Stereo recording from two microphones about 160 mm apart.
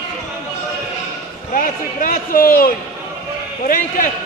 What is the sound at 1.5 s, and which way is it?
A man's voice, 60° left (ahead or behind).